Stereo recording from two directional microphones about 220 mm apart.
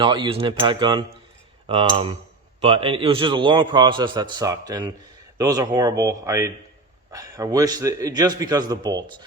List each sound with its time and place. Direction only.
0.0 s a man's voice: 25° right (ahead or behind)